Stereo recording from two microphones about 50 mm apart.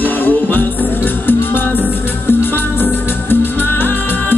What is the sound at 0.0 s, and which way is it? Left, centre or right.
Music, left.